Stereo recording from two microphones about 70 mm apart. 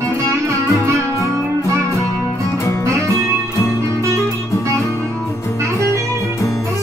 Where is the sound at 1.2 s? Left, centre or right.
Left.